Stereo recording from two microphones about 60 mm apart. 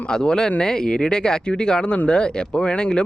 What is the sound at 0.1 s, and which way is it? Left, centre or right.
Speech, centre.